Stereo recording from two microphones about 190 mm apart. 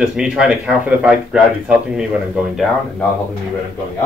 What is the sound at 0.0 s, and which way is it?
Speech, centre (ahead or behind).